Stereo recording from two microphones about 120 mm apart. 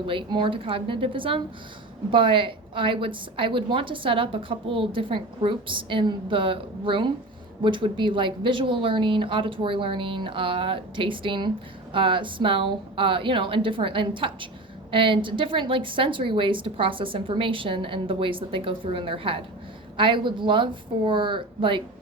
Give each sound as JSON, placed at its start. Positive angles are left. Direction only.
{"t": 0.1, "sound": "a woman's voice", "side_deg": -45}